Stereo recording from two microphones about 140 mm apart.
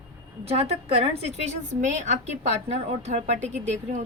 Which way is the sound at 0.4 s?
45° right (ahead or behind).